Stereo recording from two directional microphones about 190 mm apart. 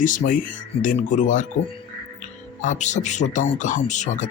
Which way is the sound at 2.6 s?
40° left (ahead or behind).